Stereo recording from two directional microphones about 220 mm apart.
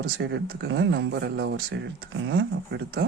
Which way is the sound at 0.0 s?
55° right (ahead or behind).